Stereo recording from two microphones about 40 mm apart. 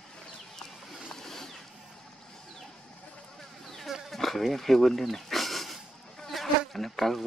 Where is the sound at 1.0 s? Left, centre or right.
Centre.